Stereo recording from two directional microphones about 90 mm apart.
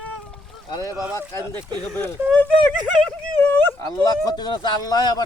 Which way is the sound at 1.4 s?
45° right (ahead or behind).